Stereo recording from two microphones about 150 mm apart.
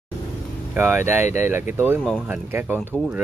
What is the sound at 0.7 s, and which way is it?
Speech, 15° right (ahead or behind).